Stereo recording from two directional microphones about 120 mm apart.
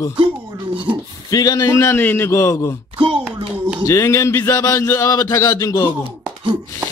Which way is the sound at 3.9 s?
25° left (ahead or behind).